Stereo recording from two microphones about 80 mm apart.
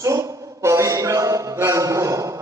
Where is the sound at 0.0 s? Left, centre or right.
Right.